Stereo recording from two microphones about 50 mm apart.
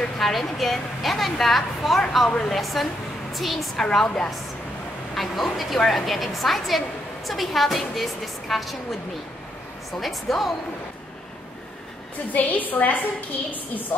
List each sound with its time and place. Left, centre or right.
0.2 s a woman's voice: centre
3.7 s a woman's voice: centre
5.1 s a woman's voice: centre
9.9 s a woman's voice: centre
12.3 s a woman's voice: left